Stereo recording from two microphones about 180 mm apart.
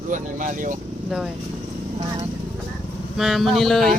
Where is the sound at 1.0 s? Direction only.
Centre (ahead or behind).